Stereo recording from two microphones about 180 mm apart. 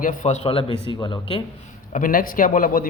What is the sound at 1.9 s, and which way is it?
Speech, 50° left (ahead or behind).